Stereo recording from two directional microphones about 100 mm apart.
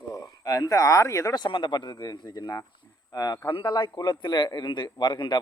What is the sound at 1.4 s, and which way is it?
Speech, 55° left (ahead or behind).